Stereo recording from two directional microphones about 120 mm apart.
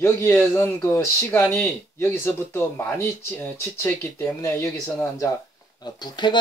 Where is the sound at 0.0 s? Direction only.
20° left (ahead or behind).